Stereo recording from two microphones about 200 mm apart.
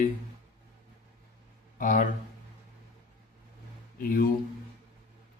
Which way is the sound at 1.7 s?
40° left (ahead or behind).